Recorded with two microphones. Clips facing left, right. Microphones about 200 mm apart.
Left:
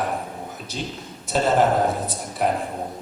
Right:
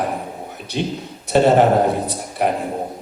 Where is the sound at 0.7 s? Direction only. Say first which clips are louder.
Right 10 dB; 65° right (ahead or behind).